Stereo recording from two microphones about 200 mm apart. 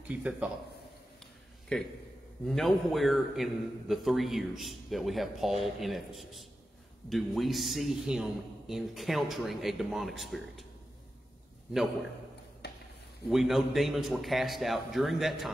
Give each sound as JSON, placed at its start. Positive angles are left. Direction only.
{"t": 0.1, "sound": "a man's voice", "side_deg": -5}
{"t": 1.7, "sound": "a man's voice", "side_deg": 5}
{"t": 12.6, "sound": "a sound", "side_deg": 55}
{"t": 13.3, "sound": "a man's voice", "side_deg": 0}